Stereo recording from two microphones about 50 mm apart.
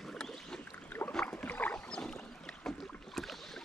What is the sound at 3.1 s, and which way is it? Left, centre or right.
Boat, centre.